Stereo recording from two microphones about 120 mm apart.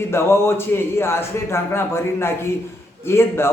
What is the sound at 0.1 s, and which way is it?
A man's voice, 20° left (ahead or behind).